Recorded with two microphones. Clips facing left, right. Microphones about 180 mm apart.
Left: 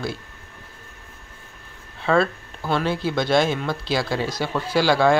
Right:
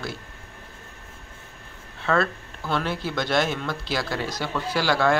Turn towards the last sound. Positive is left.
turn(degrees=15)  # may be behind; listen again after turning